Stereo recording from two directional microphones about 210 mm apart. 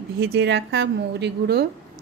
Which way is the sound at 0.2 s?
50° right (ahead or behind).